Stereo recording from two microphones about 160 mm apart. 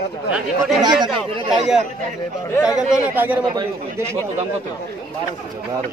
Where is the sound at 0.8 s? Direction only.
25° right (ahead or behind).